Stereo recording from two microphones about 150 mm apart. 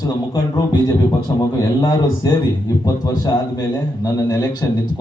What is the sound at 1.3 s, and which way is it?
A man's voice, 25° left (ahead or behind).